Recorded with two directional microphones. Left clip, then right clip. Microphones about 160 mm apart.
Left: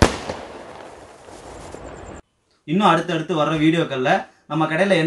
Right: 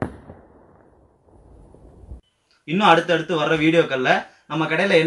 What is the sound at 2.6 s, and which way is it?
Speech, 40° left (ahead or behind).